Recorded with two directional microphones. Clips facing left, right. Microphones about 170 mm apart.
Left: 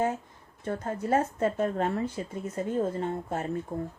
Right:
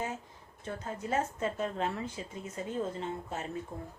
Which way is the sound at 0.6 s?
50° left (ahead or behind).